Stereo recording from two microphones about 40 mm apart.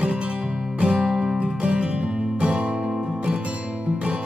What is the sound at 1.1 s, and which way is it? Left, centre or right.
Music, centre.